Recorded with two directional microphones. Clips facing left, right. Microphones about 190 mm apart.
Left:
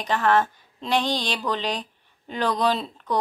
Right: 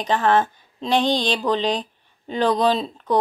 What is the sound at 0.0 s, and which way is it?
Speech, 25° right (ahead or behind).